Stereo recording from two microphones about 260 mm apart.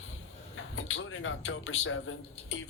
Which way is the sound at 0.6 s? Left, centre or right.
Left.